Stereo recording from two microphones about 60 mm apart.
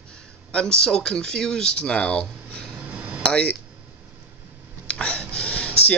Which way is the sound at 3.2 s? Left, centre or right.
Centre.